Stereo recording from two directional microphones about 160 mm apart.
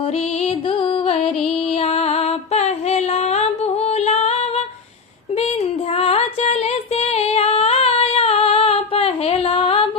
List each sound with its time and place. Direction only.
1.8 s music: 40° left (ahead or behind)
4.0 s female singing: 40° left (ahead or behind)
6.0 s music: 40° left (ahead or behind)
7.0 s female singing: 40° left (ahead or behind)